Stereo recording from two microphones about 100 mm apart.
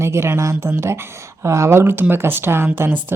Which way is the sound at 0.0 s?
25° right (ahead or behind).